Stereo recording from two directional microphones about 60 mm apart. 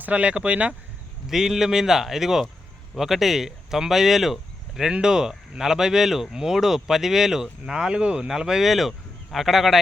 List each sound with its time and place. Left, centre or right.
0.0 s speech: right
1.3 s speech: centre